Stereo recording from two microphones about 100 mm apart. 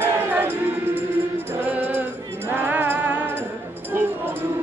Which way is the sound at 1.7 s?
15° right (ahead or behind).